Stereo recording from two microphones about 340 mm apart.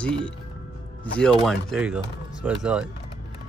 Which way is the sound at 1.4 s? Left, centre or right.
Centre.